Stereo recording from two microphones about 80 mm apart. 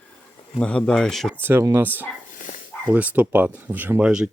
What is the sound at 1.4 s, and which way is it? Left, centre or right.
Speech, right.